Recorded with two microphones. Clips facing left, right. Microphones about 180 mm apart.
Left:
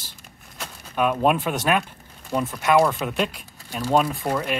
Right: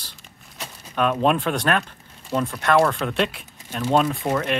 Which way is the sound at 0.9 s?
10° left (ahead or behind).